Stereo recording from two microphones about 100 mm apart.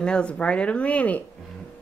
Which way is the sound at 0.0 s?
10° left (ahead or behind).